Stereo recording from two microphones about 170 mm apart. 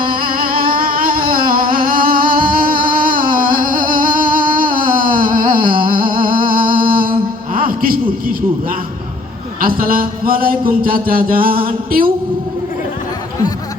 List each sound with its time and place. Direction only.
0.0 s music: 60° right (ahead or behind)
7.5 s a sound: 55° right (ahead or behind)
9.6 s speech: 55° right (ahead or behind)